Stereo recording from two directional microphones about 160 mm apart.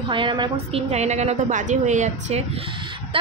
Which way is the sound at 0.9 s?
45° right (ahead or behind).